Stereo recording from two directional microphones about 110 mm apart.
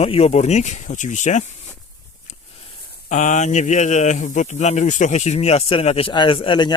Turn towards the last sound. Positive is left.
turn(degrees=45)  # may be behind; listen again after turning